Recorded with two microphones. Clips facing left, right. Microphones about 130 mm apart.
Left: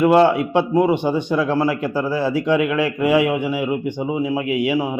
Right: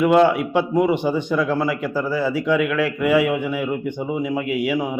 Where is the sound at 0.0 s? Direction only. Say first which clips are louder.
Left 1 dB; 5° left (ahead or behind).